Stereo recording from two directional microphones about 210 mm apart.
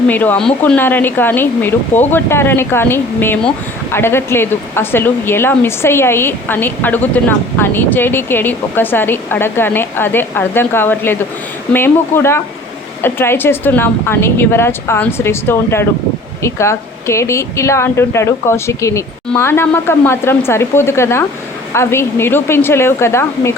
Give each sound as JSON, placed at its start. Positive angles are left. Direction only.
{"t": 0.1, "sound": "a woman's voice", "side_deg": 10}